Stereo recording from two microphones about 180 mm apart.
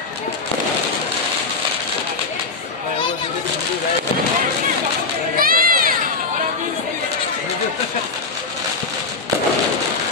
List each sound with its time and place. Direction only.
5.4 s crowd: 50° right (ahead or behind)